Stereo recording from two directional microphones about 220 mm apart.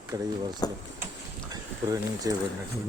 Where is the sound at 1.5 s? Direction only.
15° right (ahead or behind).